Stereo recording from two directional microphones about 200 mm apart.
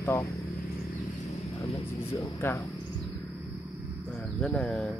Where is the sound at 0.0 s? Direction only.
15° left (ahead or behind).